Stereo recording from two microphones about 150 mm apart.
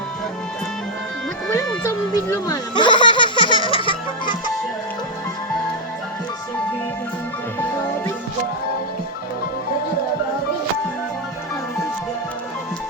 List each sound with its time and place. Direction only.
1.5 s music: 20° left (ahead or behind)
2.3 s baby laughter: 25° left (ahead or behind)